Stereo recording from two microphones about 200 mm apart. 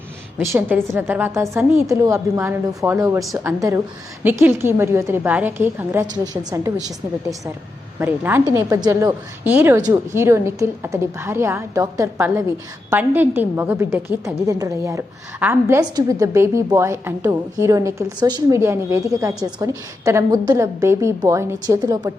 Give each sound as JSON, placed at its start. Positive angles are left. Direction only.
{"t": 0.3, "sound": "a woman's voice", "side_deg": -10}
{"t": 3.2, "sound": "a woman's voice", "side_deg": 0}
{"t": 3.4, "sound": "a woman's voice", "side_deg": -15}
{"t": 19.3, "sound": "a woman's voice", "side_deg": -5}
{"t": 19.5, "sound": "a woman's voice", "side_deg": -15}